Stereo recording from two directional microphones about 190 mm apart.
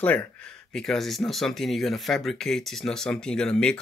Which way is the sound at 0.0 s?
10° left (ahead or behind).